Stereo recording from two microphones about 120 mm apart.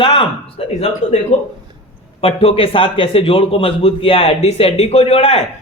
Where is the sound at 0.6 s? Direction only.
55° left (ahead or behind).